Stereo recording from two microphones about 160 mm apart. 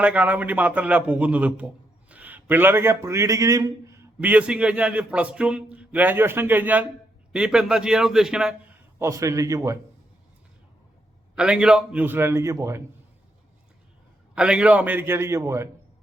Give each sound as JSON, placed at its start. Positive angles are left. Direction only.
{"t": 0.0, "sound": "a man's voice", "side_deg": -10}
{"t": 9.0, "sound": "a man's voice", "side_deg": -20}
{"t": 11.3, "sound": "a man's voice", "side_deg": -5}
{"t": 14.3, "sound": "a man's voice", "side_deg": -5}